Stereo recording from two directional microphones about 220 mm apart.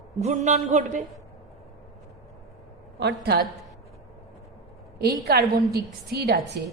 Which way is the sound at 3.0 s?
50° right (ahead or behind).